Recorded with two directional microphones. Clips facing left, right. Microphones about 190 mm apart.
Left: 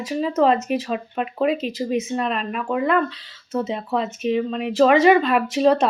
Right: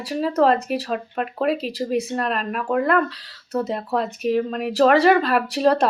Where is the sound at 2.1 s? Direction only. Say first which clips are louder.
Even; centre (ahead or behind).